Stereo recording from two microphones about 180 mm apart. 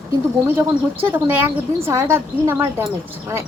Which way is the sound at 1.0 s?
10° right (ahead or behind).